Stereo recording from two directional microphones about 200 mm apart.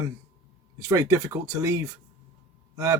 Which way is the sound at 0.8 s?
15° right (ahead or behind).